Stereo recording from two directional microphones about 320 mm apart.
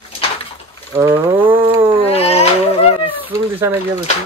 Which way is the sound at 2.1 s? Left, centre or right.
Centre.